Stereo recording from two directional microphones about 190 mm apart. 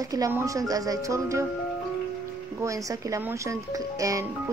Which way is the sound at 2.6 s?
15° right (ahead or behind).